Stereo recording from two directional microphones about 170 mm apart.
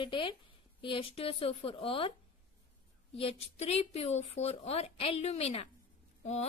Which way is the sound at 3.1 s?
35° left (ahead or behind).